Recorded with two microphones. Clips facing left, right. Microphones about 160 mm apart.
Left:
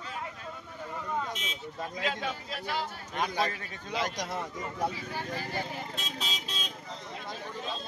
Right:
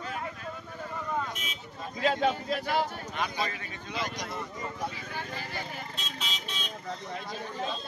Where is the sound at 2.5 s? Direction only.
55° right (ahead or behind).